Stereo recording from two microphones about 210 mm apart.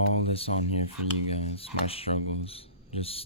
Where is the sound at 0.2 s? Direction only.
30° left (ahead or behind).